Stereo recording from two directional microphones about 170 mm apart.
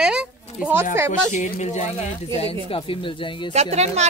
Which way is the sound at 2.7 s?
30° left (ahead or behind).